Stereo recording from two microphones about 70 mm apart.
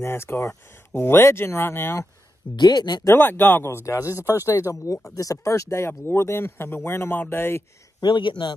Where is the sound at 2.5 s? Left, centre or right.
Left.